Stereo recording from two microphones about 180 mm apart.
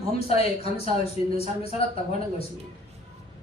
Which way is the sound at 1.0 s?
35° left (ahead or behind).